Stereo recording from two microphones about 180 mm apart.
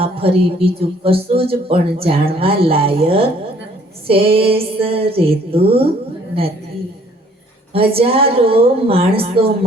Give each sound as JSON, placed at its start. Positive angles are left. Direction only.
{"t": 0.0, "sound": "speech", "side_deg": -30}
{"t": 7.7, "sound": "speech", "side_deg": -30}